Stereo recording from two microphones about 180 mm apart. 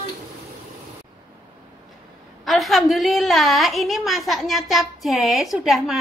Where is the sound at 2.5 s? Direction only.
Centre (ahead or behind).